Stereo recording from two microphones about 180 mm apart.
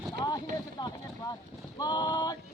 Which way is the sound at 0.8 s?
25° left (ahead or behind).